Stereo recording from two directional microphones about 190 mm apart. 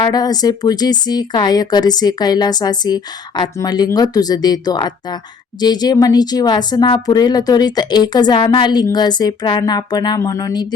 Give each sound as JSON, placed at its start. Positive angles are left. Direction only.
{"t": 0.0, "sound": "speech", "side_deg": 20}